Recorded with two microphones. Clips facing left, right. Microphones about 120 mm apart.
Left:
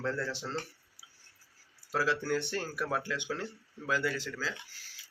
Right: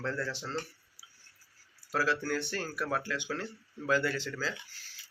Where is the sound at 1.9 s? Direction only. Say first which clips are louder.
Even; 20° left (ahead or behind).